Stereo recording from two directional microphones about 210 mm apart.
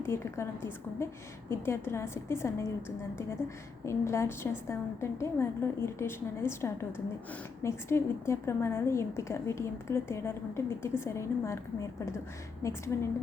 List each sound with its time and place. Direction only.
0.0 s a woman's voice: 10° left (ahead or behind)
3.8 s a woman's voice: 15° left (ahead or behind)